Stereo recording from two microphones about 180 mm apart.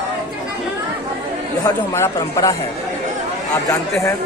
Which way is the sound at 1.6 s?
15° left (ahead or behind).